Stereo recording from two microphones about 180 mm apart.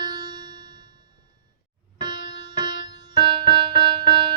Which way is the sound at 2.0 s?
25° right (ahead or behind).